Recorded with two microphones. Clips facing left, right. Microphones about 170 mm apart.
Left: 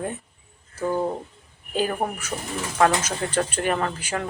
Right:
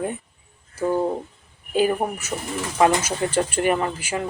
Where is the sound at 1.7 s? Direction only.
10° right (ahead or behind).